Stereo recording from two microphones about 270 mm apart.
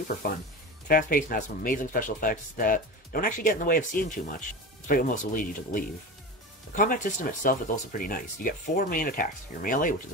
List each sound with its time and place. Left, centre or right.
0.2 s speech: left